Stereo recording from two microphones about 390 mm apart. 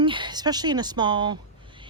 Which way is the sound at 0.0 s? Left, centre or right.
Centre.